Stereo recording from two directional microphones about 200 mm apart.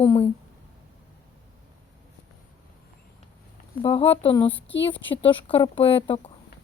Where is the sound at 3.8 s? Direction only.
30° left (ahead or behind).